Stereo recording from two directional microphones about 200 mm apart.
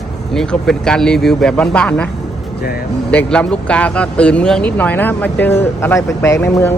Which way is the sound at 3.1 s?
5° left (ahead or behind).